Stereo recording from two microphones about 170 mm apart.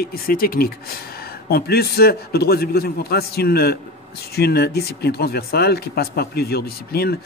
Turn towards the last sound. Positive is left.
turn(degrees=65)  # may be behind; listen again after turning